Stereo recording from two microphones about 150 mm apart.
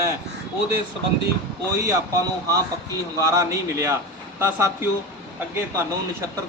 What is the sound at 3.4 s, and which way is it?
Speech, 20° right (ahead or behind).